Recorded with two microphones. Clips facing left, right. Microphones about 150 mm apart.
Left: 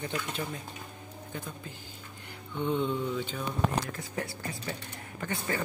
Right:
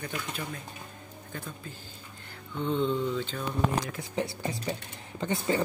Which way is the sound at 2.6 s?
10° left (ahead or behind).